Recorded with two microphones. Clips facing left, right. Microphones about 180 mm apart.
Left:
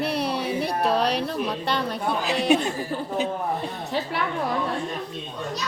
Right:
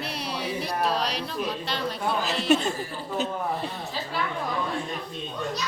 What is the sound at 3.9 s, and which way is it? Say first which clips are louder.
Speech: left 5 dB; 65° left (ahead or behind).